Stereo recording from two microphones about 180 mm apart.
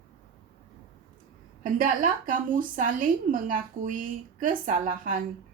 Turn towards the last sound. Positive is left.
turn(degrees=-45)  # may be behind; listen again after turning